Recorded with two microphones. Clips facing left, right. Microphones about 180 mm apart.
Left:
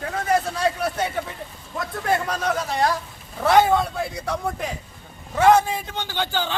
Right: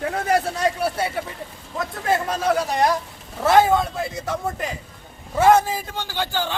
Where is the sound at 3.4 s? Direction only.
Centre (ahead or behind).